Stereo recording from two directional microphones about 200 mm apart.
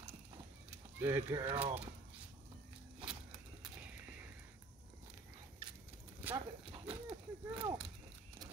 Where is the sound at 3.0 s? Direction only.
5° right (ahead or behind).